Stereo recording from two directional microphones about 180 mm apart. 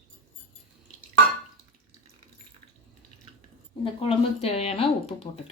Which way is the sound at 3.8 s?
30° left (ahead or behind).